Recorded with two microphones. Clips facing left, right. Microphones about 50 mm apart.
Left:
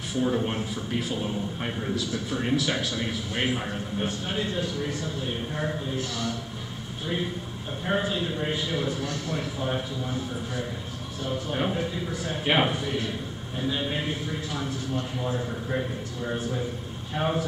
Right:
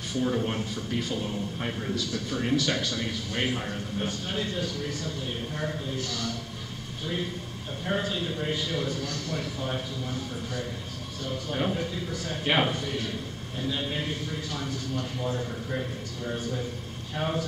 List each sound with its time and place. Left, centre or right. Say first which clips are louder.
0.1 s a man's voice: left 2 dB; centre
7.8 s a man's voice: left 2 dB; centre